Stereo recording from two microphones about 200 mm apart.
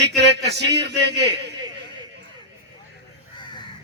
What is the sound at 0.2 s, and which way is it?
A man's voice, 55° right (ahead or behind).